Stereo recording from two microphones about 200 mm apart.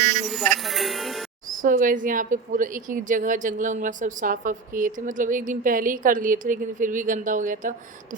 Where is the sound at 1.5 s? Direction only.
40° right (ahead or behind).